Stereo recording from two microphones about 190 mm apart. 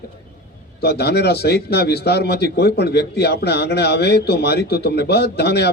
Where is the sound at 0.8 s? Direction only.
55° left (ahead or behind).